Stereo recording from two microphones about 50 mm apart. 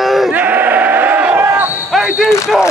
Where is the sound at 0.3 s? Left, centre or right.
Right.